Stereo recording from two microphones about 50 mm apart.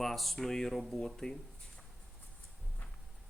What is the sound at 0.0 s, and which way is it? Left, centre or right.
Speech, centre.